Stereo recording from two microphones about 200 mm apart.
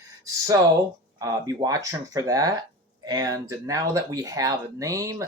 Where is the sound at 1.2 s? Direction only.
15° right (ahead or behind).